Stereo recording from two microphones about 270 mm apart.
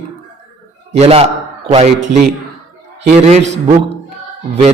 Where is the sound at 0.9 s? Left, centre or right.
Right.